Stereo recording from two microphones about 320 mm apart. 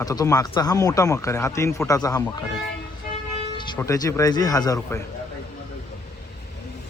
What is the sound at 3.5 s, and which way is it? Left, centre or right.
Speech, centre.